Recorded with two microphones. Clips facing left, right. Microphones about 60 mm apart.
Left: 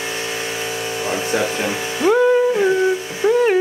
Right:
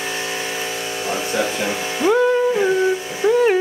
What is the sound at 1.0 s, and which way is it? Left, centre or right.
Music, centre.